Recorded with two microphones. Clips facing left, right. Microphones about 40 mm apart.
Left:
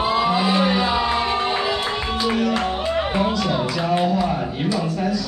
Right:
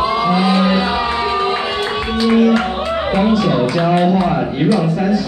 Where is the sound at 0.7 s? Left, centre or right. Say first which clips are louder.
Right 3 dB; centre.